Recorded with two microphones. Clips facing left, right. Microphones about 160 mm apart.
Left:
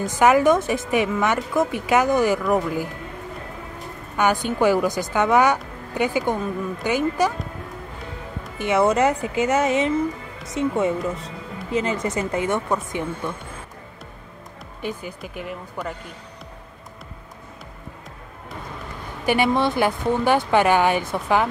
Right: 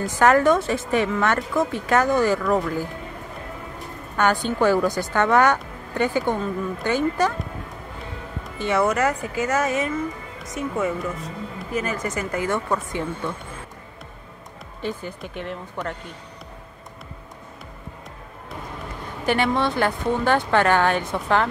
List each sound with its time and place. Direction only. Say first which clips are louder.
0.0 s a woman's voice: left 1 dB; 10° left (ahead or behind)
4.2 s a woman's voice: left 1 dB; 10° left (ahead or behind)
8.5 s speech: left 2 dB; 20° left (ahead or behind)
14.8 s speech: right 1 dB; 10° left (ahead or behind)
19.2 s a woman's voice: left 2 dB; 10° left (ahead or behind)